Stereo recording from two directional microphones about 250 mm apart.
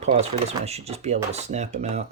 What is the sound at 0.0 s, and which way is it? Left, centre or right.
Speech, right.